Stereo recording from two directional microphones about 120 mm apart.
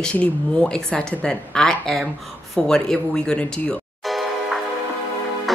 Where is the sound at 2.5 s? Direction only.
5° left (ahead or behind).